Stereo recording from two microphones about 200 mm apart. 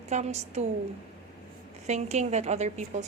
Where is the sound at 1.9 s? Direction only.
35° right (ahead or behind).